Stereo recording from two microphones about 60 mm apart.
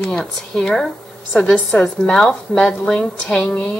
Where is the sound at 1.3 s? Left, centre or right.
Centre.